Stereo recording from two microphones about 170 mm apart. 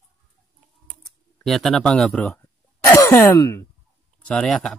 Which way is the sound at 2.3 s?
15° left (ahead or behind).